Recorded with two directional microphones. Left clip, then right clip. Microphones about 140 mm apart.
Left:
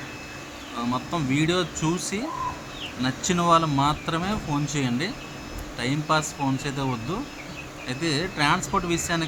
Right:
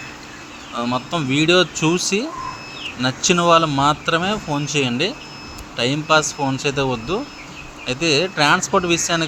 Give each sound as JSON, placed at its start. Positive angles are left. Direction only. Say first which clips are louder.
{"t": 0.8, "sound": "speech", "louder": "right 6 dB", "side_deg": -20}